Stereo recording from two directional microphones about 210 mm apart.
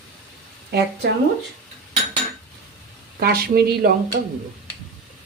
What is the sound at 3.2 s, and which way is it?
A woman's voice, 45° right (ahead or behind).